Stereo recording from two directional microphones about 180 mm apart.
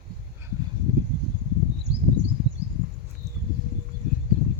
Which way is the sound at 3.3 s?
15° right (ahead or behind).